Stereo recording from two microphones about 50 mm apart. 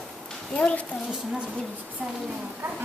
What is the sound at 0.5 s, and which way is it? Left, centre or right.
Speech, left.